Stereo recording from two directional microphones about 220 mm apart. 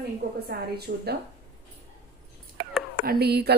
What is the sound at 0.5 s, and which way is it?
Speech, 45° right (ahead or behind).